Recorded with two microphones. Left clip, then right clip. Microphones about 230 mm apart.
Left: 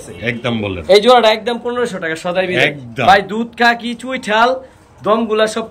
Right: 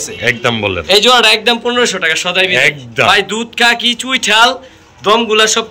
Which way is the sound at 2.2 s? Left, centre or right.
Centre.